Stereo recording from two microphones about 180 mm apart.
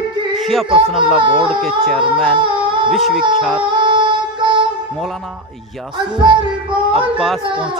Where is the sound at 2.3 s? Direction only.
25° right (ahead or behind).